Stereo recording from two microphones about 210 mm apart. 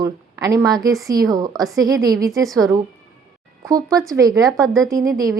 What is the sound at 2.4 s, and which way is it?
Speech, centre (ahead or behind).